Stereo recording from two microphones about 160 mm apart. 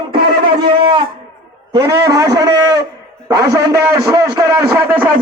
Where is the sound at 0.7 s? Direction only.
30° right (ahead or behind).